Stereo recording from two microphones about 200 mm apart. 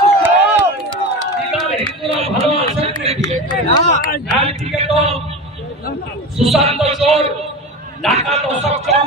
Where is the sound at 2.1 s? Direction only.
30° right (ahead or behind).